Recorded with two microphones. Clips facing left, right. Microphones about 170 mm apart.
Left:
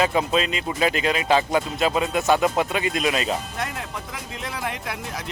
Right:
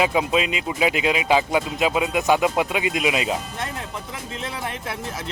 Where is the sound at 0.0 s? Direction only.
10° right (ahead or behind).